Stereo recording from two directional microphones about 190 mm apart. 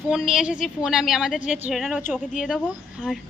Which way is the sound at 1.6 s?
5° right (ahead or behind).